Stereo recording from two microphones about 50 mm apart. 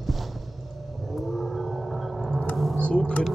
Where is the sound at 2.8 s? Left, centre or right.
Centre.